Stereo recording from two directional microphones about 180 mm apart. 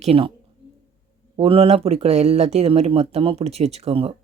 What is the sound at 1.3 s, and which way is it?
Speech, 35° right (ahead or behind).